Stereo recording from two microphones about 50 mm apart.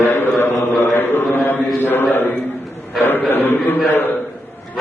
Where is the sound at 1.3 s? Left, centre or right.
Left.